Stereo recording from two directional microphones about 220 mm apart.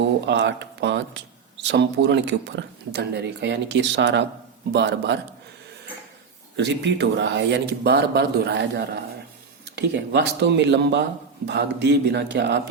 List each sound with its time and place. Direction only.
0.3 s speech: 50° right (ahead or behind)
6.6 s speech: 55° right (ahead or behind)